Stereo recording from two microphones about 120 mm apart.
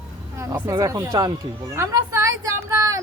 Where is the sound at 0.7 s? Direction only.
30° right (ahead or behind).